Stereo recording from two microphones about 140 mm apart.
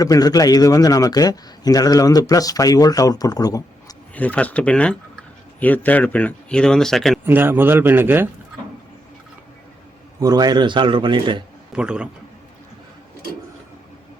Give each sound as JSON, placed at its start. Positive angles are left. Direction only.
{"t": 0.0, "sound": "a man's voice", "side_deg": 25}
{"t": 4.1, "sound": "speech", "side_deg": 10}
{"t": 7.3, "sound": "a man's voice", "side_deg": -15}
{"t": 10.2, "sound": "a man's voice", "side_deg": -30}
{"t": 11.7, "sound": "a man's voice", "side_deg": -5}